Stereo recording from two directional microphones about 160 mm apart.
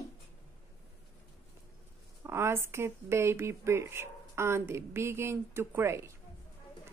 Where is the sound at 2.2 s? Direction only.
15° right (ahead or behind).